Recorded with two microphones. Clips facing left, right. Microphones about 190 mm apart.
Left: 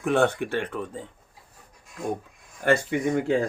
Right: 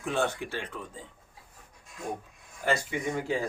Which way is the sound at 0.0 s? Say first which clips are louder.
Left 7 dB; 60° left (ahead or behind).